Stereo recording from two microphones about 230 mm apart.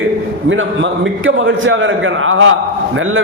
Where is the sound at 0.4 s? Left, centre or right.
Right.